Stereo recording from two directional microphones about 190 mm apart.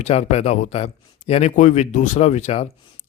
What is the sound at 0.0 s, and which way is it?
Speech, 35° left (ahead or behind).